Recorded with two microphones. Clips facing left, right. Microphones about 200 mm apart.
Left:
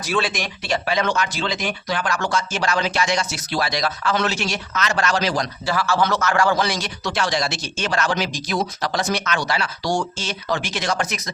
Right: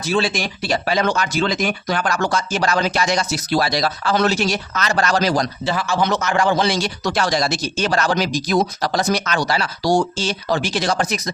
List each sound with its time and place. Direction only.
0.0 s speech: 25° right (ahead or behind)
5.6 s a man's voice: 20° right (ahead or behind)
7.0 s speech: 40° right (ahead or behind)